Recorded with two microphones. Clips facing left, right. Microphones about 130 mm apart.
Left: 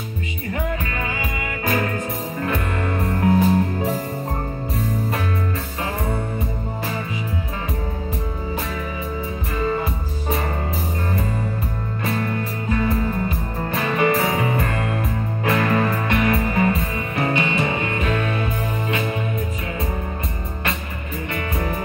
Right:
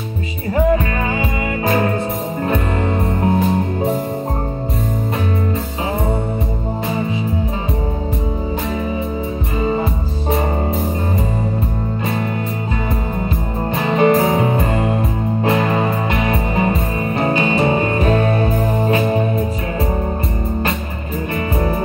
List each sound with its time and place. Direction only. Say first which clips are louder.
0.5 s music: right 11 dB; 35° right (ahead or behind)
9.6 s music: right 4 dB; 25° right (ahead or behind)
12.7 s music: left 3 dB; 25° right (ahead or behind)